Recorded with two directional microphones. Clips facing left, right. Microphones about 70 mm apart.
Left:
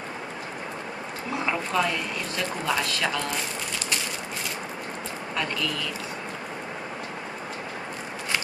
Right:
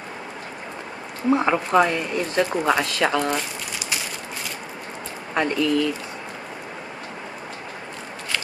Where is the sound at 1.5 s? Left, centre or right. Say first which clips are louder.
Right 3 dB; right.